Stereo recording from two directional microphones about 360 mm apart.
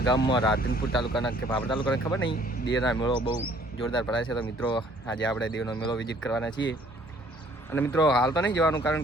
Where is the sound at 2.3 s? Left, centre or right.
Left.